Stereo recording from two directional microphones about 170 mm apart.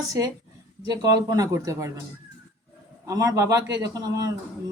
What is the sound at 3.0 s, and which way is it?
Speech, 20° right (ahead or behind).